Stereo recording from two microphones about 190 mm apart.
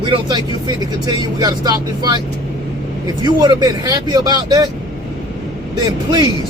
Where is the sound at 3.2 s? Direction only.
20° right (ahead or behind).